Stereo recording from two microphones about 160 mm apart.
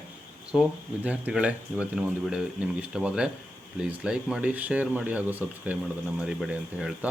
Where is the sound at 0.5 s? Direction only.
5° right (ahead or behind).